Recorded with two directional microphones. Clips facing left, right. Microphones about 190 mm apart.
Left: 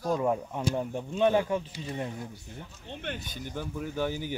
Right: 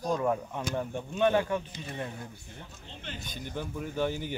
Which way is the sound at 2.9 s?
60° left (ahead or behind).